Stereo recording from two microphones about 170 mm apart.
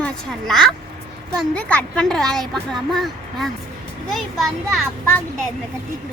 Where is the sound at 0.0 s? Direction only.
Centre (ahead or behind).